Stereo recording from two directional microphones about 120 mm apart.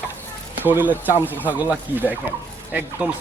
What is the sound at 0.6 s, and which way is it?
Speech, 15° right (ahead or behind).